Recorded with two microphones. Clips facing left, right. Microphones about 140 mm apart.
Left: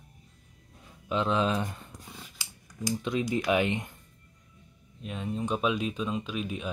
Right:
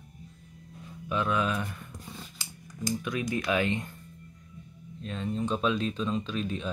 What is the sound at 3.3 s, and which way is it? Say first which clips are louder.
Speech: left 1 dB; 20° left (ahead or behind).